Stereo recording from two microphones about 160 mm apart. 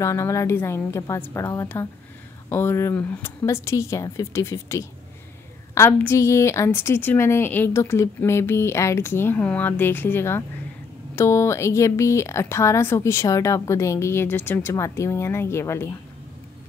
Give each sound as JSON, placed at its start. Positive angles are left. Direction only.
{"t": 0.0, "sound": "speech", "side_deg": 20}